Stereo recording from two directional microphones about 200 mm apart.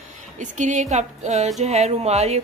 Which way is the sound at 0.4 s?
40° right (ahead or behind).